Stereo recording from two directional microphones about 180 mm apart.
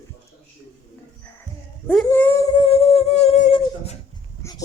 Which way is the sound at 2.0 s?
10° left (ahead or behind).